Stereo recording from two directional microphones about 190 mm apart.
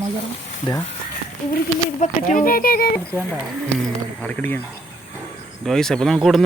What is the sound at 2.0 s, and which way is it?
Speech, 40° left (ahead or behind).